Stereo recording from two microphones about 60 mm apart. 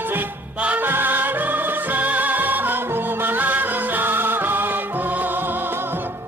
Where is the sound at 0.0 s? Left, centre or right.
Right.